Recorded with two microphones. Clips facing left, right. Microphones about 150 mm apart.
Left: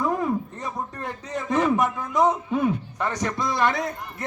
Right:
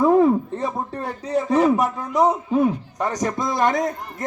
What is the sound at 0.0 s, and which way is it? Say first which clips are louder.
A man's voice: right 9 dB; 30° right (ahead or behind).